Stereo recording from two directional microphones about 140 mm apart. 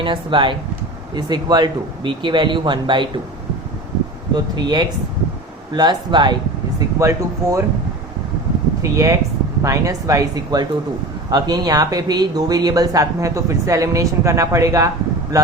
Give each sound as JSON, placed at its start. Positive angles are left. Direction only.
{"t": 0.0, "sound": "speech", "side_deg": -35}
{"t": 4.4, "sound": "speech", "side_deg": -30}
{"t": 6.7, "sound": "speech", "side_deg": -20}
{"t": 8.8, "sound": "speech", "side_deg": -20}